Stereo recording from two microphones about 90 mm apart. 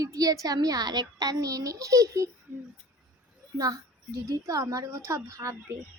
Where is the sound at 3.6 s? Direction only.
40° right (ahead or behind).